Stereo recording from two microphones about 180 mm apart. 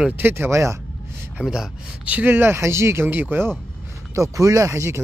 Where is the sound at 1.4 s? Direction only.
5° right (ahead or behind).